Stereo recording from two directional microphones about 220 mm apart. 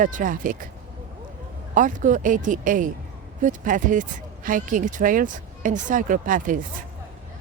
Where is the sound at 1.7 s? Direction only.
35° right (ahead or behind).